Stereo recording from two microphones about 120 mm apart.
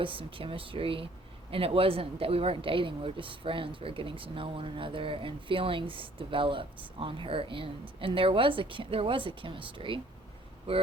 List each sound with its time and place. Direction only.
0.0 s a woman's voice: 45° right (ahead or behind)